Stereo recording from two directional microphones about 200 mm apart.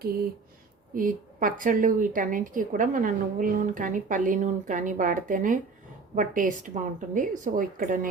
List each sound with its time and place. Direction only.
0.9 s a woman's voice: 40° right (ahead or behind)